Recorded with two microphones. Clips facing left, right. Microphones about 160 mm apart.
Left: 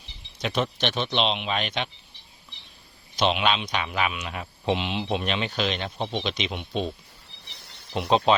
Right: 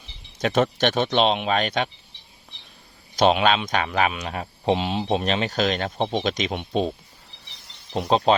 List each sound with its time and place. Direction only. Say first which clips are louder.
0.3 s speech: right 6 dB; 45° right (ahead or behind)
3.2 s speech: right 5 dB; 45° right (ahead or behind)
7.9 s speech: right 2 dB; 35° right (ahead or behind)